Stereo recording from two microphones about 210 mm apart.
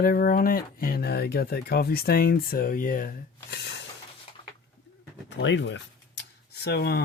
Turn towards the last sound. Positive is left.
turn(degrees=50)  # may be behind; listen again after turning